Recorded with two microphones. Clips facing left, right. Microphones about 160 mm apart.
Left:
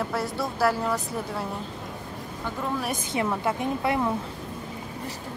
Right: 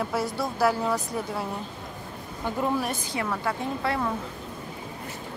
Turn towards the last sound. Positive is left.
turn(degrees=20)  # may be behind; listen again after turning